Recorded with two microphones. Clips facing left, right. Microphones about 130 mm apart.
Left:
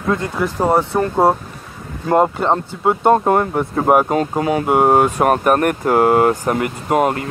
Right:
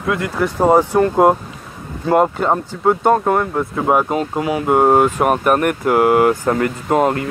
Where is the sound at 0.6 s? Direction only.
15° right (ahead or behind).